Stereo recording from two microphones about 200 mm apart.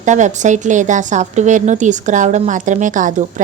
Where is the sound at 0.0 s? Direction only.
35° right (ahead or behind).